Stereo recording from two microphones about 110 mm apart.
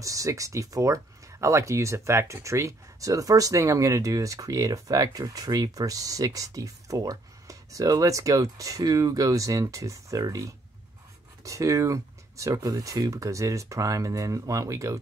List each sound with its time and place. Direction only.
0.0 s speech: 30° right (ahead or behind)